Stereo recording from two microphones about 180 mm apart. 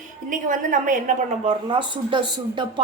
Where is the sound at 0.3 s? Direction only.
45° right (ahead or behind).